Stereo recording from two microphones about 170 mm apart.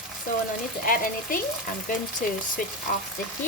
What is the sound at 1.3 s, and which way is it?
Speech, 55° left (ahead or behind).